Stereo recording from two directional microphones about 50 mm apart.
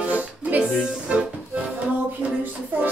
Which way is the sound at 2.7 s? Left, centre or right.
Right.